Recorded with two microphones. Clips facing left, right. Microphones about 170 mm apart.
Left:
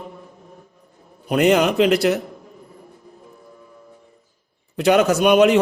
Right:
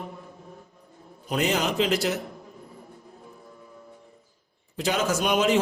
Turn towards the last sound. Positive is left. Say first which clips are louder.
# left 8 dB
turn(degrees=65)  # may be behind; listen again after turning